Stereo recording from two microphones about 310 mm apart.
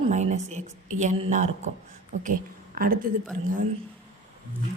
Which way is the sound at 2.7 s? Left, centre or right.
Right.